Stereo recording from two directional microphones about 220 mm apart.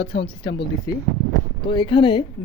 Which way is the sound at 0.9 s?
15° left (ahead or behind).